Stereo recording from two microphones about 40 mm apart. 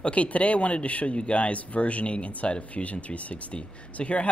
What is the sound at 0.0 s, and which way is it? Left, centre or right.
Speech, left.